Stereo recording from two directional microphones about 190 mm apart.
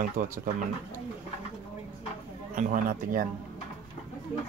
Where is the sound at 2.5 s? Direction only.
45° right (ahead or behind).